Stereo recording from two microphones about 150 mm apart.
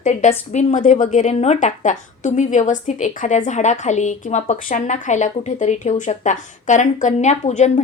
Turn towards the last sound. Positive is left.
turn(degrees=55)  # may be behind; listen again after turning